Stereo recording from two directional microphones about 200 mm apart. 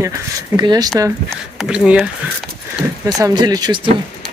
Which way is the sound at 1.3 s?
5° right (ahead or behind).